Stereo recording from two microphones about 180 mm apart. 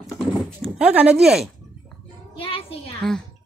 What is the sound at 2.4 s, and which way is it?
Speech, 30° left (ahead or behind).